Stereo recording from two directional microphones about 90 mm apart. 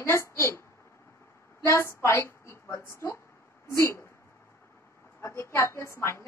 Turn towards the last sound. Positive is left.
turn(degrees=30)  # may be behind; listen again after turning